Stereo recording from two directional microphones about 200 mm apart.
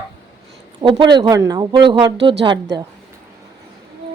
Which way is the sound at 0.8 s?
25° right (ahead or behind).